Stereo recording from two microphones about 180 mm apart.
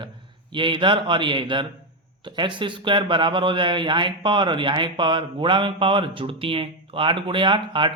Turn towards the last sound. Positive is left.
turn(degrees=-25)  # may be behind; listen again after turning